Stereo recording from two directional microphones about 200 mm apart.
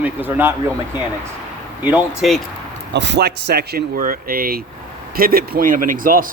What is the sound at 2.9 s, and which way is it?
Speech, 60° right (ahead or behind).